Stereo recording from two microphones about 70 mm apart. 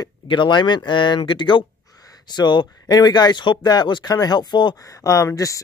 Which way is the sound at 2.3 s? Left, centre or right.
Left.